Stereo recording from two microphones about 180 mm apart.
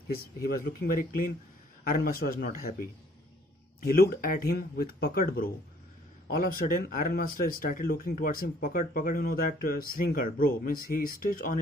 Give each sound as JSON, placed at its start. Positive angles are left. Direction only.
{"t": 0.1, "sound": "speech", "side_deg": 60}